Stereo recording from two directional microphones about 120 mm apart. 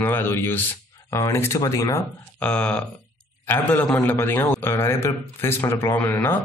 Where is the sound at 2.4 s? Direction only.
10° left (ahead or behind).